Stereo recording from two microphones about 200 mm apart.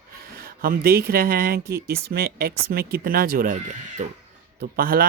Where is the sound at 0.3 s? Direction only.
45° right (ahead or behind).